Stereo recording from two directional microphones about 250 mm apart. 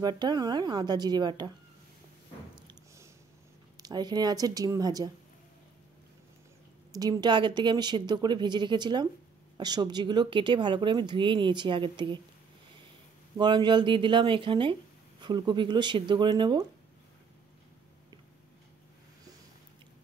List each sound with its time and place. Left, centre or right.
0.0 s speech: centre
3.7 s speech: centre
6.9 s speech: centre
13.4 s speech: centre